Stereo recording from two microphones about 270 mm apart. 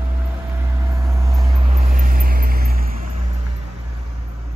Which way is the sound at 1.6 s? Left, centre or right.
Right.